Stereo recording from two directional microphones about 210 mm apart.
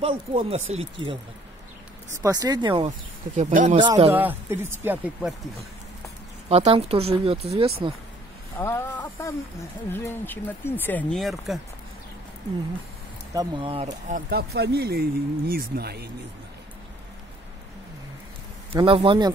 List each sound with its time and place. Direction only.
0.0 s speech: 25° right (ahead or behind)
2.2 s speech: 15° right (ahead or behind)
3.3 s speech: 35° right (ahead or behind)
3.8 s speech: 20° right (ahead or behind)
4.1 s speech: 10° right (ahead or behind)
6.5 s speech: 30° right (ahead or behind)
8.5 s speech: 10° left (ahead or behind)
13.3 s speech: 20° right (ahead or behind)
14.1 s speech: 50° right (ahead or behind)
18.7 s speech: 25° right (ahead or behind)